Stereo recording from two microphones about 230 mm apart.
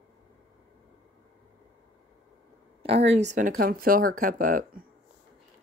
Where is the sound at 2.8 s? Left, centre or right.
Right.